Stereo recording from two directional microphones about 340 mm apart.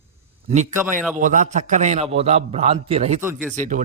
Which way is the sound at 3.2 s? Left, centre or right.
Centre.